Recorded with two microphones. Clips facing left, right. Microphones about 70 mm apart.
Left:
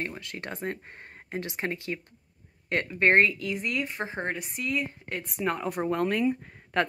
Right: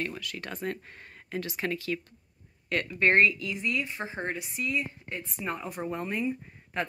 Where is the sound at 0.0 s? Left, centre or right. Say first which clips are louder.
Even; left.